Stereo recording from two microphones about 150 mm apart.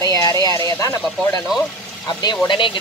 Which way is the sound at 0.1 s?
25° left (ahead or behind).